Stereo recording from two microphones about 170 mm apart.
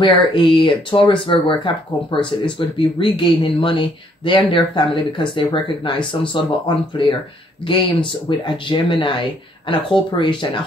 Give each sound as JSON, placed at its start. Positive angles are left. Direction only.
{"t": 0.0, "sound": "speech", "side_deg": 30}